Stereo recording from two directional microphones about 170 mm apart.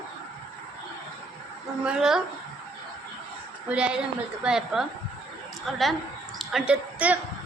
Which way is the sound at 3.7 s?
5° right (ahead or behind).